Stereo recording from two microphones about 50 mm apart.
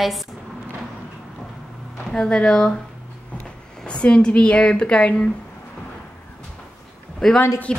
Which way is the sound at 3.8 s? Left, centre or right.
Left.